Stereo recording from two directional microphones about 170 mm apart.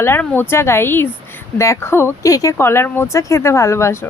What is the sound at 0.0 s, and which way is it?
Speech, 15° left (ahead or behind).